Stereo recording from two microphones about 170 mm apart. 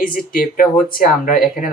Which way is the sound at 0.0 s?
55° left (ahead or behind).